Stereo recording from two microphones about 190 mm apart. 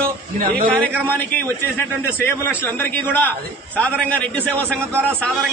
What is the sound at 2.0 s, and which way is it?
A man's voice, 10° left (ahead or behind).